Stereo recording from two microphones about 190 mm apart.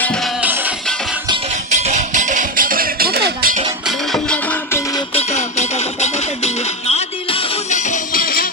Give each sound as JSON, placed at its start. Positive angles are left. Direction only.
{"t": 0.0, "sound": "music", "side_deg": 5}
{"t": 1.5, "sound": "music", "side_deg": -35}
{"t": 3.8, "sound": "music", "side_deg": 0}
{"t": 5.1, "sound": "music", "side_deg": 35}